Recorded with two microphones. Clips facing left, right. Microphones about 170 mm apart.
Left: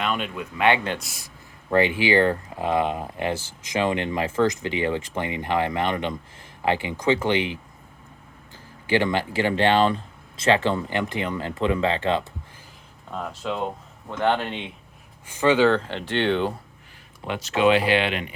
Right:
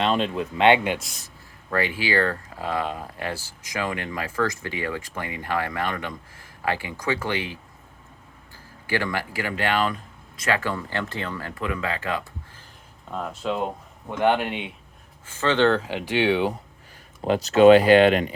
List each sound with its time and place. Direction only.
0.0 s speech: 30° right (ahead or behind)
0.9 s speech: 5° left (ahead or behind)
1.7 s speech: 20° left (ahead or behind)
8.9 s speech: 20° left (ahead or behind)
13.1 s speech: 5° right (ahead or behind)
15.3 s speech: 15° left (ahead or behind); by 16.6 s 10° right (ahead or behind)
17.2 s speech: 40° right (ahead or behind)